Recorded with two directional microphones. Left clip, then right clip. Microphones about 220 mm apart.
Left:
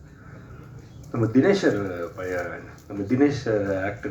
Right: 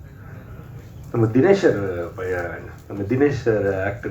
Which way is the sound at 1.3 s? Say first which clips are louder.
Right 4 dB; 55° left (ahead or behind).